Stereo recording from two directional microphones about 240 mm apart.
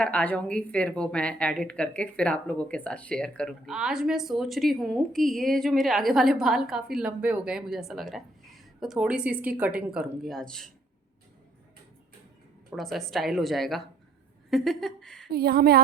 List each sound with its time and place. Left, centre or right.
0.0 s a woman's voice: centre
12.7 s a woman's voice: centre
15.3 s a woman's voice: right